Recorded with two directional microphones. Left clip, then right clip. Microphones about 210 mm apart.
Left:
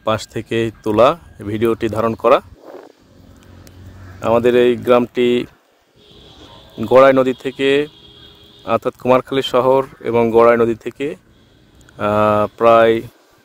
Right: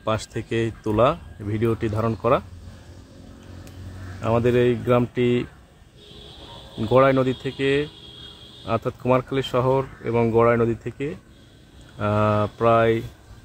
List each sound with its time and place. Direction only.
0.0 s speech: 40° left (ahead or behind)
4.2 s speech: 50° left (ahead or behind)
6.8 s speech: 50° left (ahead or behind)